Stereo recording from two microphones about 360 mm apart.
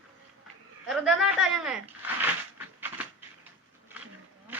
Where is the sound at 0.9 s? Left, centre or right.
Centre.